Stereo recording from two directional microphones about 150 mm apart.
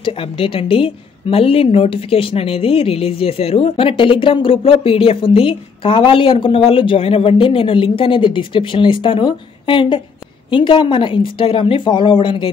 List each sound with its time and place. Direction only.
0.0 s a woman's voice: 35° left (ahead or behind)